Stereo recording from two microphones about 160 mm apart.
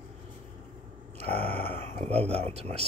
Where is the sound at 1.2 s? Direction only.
40° right (ahead or behind).